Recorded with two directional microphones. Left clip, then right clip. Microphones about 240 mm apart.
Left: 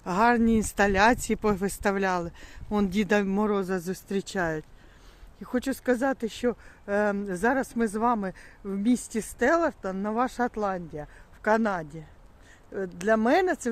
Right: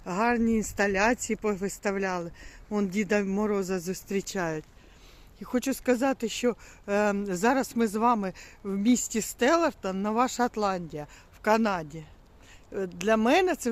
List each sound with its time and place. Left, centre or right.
0.0 s speech: centre